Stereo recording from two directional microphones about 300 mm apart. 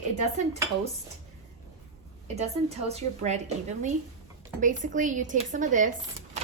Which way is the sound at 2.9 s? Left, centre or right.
Right.